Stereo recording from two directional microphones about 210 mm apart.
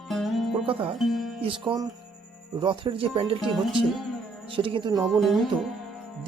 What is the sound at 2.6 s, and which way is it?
Speech, 25° right (ahead or behind).